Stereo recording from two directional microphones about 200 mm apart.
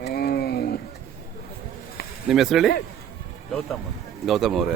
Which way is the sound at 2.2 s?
Centre (ahead or behind).